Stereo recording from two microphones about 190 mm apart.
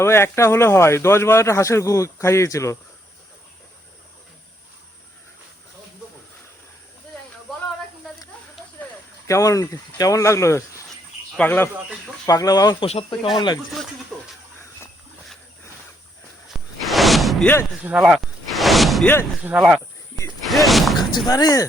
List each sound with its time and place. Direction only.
0.0 s speech: 15° left (ahead or behind)
9.2 s speech: 15° left (ahead or behind)
12.9 s speech: 30° left (ahead or behind)
14.1 s bathtub: 5° left (ahead or behind)
16.5 s whoosh: centre (ahead or behind)
17.8 s a sound: 5° right (ahead or behind)
19.4 s speech: 5° right (ahead or behind)
20.4 s a sound: centre (ahead or behind)
21.2 s speech: 20° left (ahead or behind)